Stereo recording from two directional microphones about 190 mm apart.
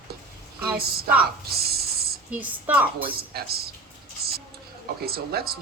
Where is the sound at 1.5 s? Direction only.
55° right (ahead or behind).